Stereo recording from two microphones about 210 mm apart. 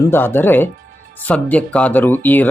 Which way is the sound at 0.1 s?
10° left (ahead or behind).